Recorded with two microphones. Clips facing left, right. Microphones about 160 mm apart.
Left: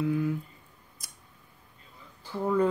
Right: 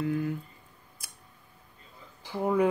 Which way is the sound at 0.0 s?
Centre (ahead or behind).